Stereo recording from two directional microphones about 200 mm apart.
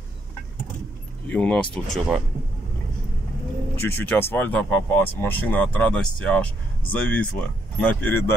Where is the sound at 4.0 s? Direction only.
10° left (ahead or behind).